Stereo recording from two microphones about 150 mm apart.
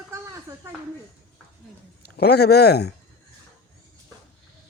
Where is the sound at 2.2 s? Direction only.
90° left.